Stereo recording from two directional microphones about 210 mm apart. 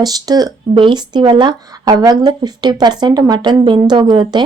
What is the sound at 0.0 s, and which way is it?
Speech, 20° right (ahead or behind).